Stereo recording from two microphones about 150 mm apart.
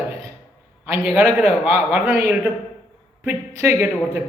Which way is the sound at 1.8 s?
15° right (ahead or behind).